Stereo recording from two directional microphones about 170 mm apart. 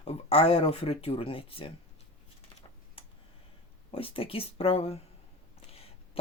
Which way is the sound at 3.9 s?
30° left (ahead or behind).